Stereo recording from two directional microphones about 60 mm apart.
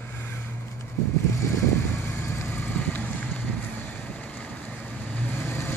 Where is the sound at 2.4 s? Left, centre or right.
Left.